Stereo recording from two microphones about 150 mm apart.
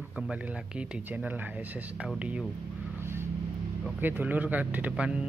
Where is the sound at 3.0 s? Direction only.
15° right (ahead or behind).